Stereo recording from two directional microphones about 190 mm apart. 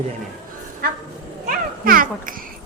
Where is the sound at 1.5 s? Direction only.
50° right (ahead or behind).